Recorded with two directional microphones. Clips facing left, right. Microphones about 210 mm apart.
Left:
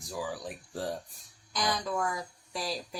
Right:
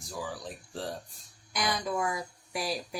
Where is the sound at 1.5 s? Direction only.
10° right (ahead or behind).